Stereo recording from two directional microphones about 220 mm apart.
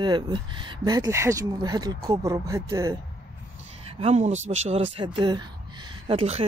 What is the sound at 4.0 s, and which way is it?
Speech, 30° right (ahead or behind).